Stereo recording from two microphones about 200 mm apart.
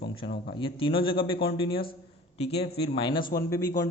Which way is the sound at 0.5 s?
25° left (ahead or behind).